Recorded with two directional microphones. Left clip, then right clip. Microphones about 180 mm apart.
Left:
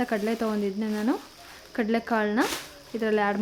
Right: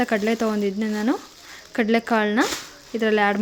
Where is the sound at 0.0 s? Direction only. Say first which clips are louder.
Right 5 dB; 15° right (ahead or behind).